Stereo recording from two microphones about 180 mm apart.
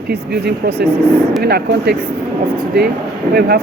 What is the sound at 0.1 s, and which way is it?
Speech, 65° right (ahead or behind).